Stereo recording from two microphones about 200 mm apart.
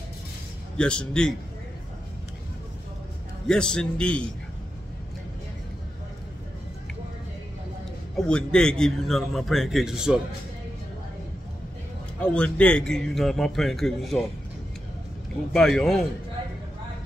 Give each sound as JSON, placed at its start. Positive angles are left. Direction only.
{"t": 0.7, "sound": "a man's voice", "side_deg": 5}
{"t": 3.4, "sound": "a man's voice", "side_deg": 5}
{"t": 8.2, "sound": "a man's voice", "side_deg": 5}
{"t": 12.2, "sound": "a man's voice", "side_deg": 5}
{"t": 15.5, "sound": "a man's voice", "side_deg": 0}